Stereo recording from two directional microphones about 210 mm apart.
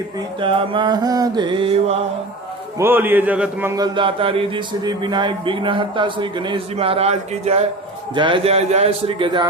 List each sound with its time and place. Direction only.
0.3 s speech: 25° right (ahead or behind)
2.7 s speech: 10° right (ahead or behind)